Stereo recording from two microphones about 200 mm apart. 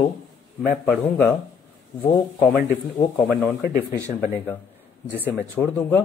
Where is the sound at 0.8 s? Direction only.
10° left (ahead or behind).